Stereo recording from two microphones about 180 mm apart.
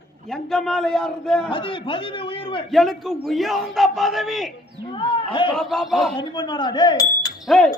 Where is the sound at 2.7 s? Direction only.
Centre (ahead or behind).